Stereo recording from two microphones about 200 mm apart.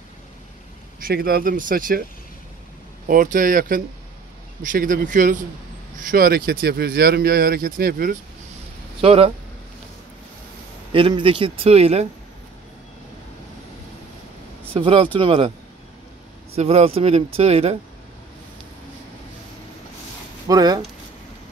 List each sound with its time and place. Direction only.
0.9 s speech: 45° right (ahead or behind)
3.1 s speech: 40° right (ahead or behind)
9.0 s speech: 30° right (ahead or behind)
10.9 s speech: 25° right (ahead or behind)
14.7 s speech: 25° right (ahead or behind)
16.5 s speech: 30° right (ahead or behind)
20.4 s a sound: 20° right (ahead or behind)